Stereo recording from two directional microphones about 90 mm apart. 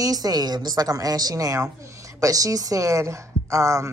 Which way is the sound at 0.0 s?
45° right (ahead or behind).